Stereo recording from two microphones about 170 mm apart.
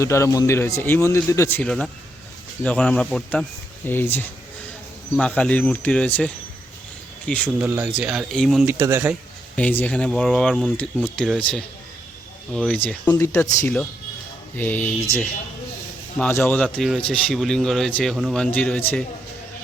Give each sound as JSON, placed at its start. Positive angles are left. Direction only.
{"t": 0.0, "sound": "speech", "side_deg": 15}
{"t": 7.6, "sound": "speech", "side_deg": -5}
{"t": 8.6, "sound": "speech", "side_deg": -15}
{"t": 9.6, "sound": "speech", "side_deg": 10}
{"t": 16.1, "sound": "speech", "side_deg": 5}